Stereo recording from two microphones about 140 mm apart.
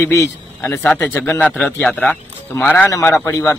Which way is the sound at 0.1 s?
15° left (ahead or behind).